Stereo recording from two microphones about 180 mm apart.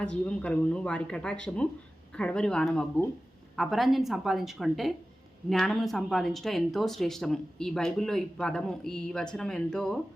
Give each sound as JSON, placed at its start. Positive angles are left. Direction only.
{"t": 0.0, "sound": "speech", "side_deg": 5}